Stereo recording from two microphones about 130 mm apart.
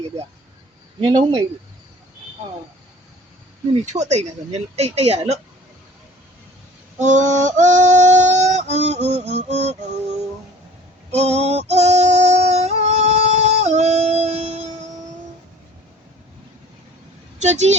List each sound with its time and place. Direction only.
0.9 s speech: 40° right (ahead or behind)
3.8 s speech: 60° right (ahead or behind)
7.0 s a sound: 70° right (ahead or behind)
17.4 s speech: 60° right (ahead or behind)